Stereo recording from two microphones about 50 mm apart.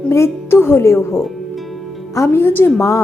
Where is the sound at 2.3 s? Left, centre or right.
Left.